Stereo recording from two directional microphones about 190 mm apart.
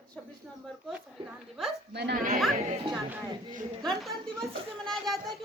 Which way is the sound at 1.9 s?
60° right (ahead or behind).